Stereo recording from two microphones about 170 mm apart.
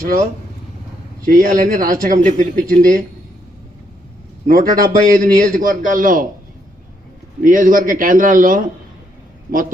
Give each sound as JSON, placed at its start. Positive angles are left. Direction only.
{"t": 0.0, "sound": "a man's voice", "side_deg": -55}
{"t": 4.4, "sound": "a man's voice", "side_deg": -55}
{"t": 7.4, "sound": "a man's voice", "side_deg": -50}